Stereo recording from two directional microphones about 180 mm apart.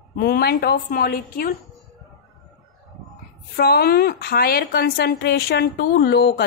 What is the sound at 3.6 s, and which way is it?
Speech, 60° left (ahead or behind).